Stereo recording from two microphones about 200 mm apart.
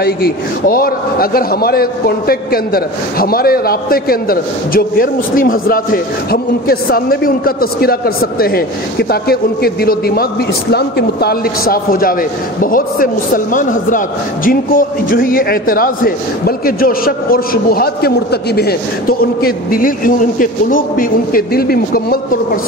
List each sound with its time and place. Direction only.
0.0 s speech: 50° left (ahead or behind)